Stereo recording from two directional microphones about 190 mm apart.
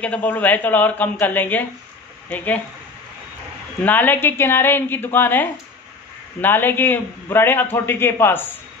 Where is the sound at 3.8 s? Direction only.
10° left (ahead or behind).